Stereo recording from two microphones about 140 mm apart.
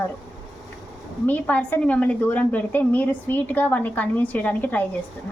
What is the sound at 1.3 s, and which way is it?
A woman's voice, 10° left (ahead or behind).